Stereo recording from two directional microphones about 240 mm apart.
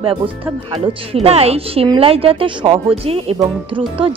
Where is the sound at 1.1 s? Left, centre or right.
Right.